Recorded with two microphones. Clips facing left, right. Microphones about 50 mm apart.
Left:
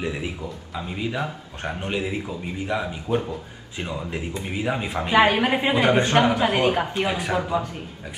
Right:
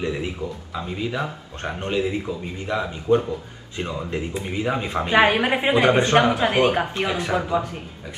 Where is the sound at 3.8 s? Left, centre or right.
Centre.